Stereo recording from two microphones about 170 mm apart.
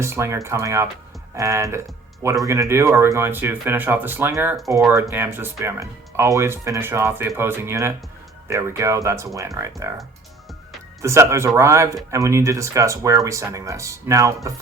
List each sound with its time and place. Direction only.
0.0 s speech: 15° right (ahead or behind)
11.0 s speech: 15° right (ahead or behind)